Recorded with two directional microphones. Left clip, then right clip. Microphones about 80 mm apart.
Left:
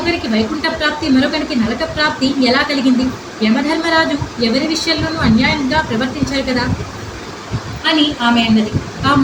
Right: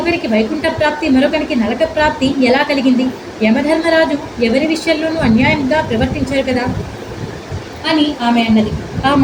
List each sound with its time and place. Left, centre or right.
0.0 s a woman's voice: left
7.9 s a woman's voice: left